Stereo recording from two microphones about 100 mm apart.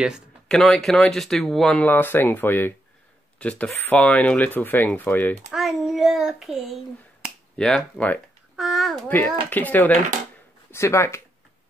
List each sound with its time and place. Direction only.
0.5 s speech: 5° left (ahead or behind)
1.8 s speech: 20° left (ahead or behind)
5.5 s speech: centre (ahead or behind)
8.5 s speech: centre (ahead or behind)
9.1 s speech: 15° left (ahead or behind)
10.7 s speech: 25° left (ahead or behind)